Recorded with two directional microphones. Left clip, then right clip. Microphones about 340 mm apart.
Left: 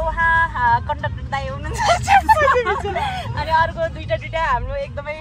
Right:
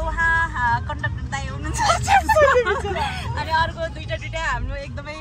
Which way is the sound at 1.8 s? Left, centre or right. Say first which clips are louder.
Left 2 dB; centre.